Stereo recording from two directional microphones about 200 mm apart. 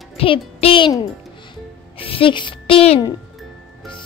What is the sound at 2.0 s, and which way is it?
A child's voice, 25° left (ahead or behind).